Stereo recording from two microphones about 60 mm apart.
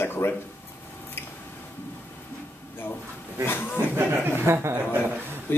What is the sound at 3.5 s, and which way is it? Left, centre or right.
Speech, left.